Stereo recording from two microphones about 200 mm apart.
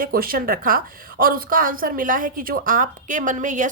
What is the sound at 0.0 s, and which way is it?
A woman's voice, 45° right (ahead or behind).